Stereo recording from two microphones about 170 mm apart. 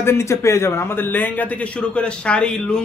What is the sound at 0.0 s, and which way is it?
A man's voice, 15° left (ahead or behind).